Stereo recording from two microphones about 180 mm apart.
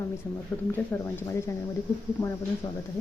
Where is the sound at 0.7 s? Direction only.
10° left (ahead or behind).